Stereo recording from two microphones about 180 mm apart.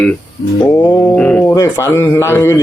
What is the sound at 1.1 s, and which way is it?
A man's voice, 5° left (ahead or behind).